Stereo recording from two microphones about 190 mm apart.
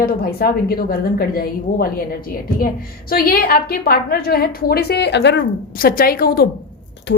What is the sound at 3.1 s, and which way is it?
A woman's voice, 50° left (ahead or behind).